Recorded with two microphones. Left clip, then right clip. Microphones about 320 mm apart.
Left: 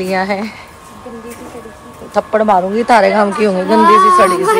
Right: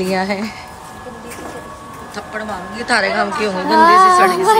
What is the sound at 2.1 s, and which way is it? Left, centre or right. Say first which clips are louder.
A woman's voice: left 15 dB; centre.